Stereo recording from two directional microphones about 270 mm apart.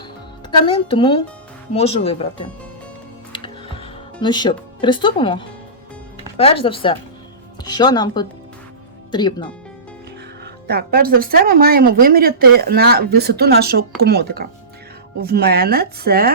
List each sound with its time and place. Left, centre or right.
0.7 s speech: centre
3.3 s music: centre
6.3 s speech: left
10.4 s speech: right